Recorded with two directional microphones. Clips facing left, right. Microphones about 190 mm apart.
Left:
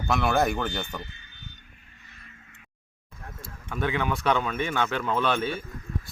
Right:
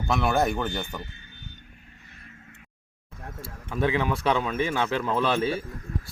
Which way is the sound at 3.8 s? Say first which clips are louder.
Right 3 dB; 30° right (ahead or behind).